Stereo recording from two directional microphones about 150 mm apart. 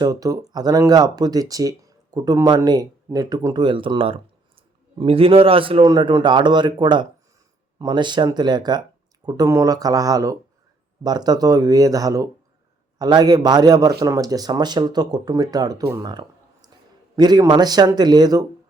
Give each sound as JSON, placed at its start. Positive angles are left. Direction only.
{"t": 0.0, "sound": "a man's voice", "side_deg": -25}
{"t": 15.9, "sound": "a sound", "side_deg": -25}
{"t": 17.2, "sound": "speech", "side_deg": -25}